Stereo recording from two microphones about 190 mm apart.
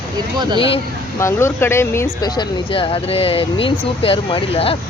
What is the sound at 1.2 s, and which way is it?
Speech, 15° left (ahead or behind).